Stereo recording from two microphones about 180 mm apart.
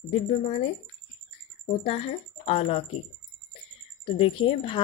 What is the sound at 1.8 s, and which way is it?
Speech, 35° left (ahead or behind).